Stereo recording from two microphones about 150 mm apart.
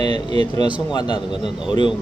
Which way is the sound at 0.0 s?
40° right (ahead or behind).